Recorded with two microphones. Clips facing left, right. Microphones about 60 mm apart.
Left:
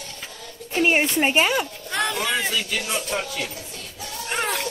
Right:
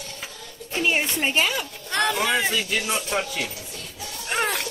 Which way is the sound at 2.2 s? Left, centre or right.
Centre.